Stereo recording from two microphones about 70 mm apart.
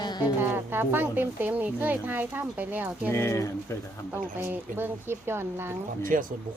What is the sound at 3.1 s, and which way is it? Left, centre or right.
Speech, left.